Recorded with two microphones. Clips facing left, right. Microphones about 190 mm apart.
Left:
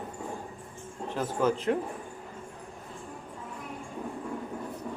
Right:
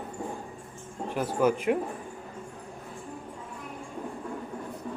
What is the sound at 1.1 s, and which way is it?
Speech, 10° right (ahead or behind).